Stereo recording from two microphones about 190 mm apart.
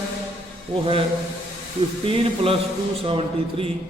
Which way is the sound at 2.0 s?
30° right (ahead or behind).